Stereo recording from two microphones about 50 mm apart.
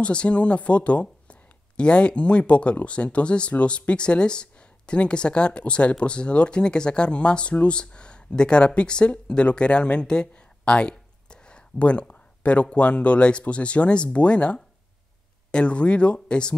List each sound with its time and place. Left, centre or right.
0.0 s speech: left